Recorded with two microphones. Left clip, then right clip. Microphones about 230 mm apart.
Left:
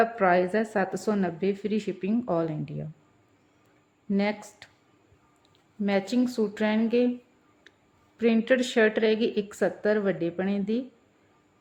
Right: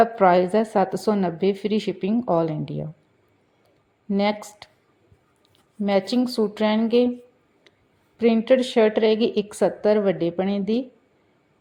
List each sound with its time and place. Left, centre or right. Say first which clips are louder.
0.0 s a woman's voice: right 6 dB; right
4.1 s a woman's voice: right 6 dB; centre
5.8 s a woman's voice: right 5 dB; centre
8.2 s a woman's voice: right 5 dB; centre